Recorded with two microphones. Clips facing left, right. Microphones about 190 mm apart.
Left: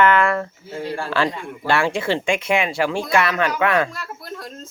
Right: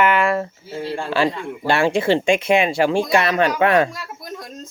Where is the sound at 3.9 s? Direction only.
15° right (ahead or behind).